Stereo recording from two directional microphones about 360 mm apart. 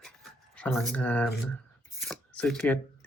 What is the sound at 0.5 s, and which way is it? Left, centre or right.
Speech, centre.